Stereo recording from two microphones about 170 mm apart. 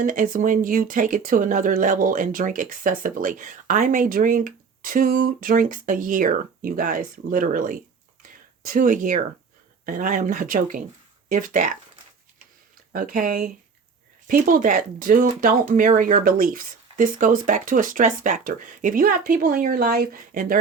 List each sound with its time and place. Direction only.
0.0 s speech: 50° right (ahead or behind)
8.2 s a sound: 55° right (ahead or behind)
9.8 s speech: 50° right (ahead or behind)
12.9 s speech: 55° right (ahead or behind)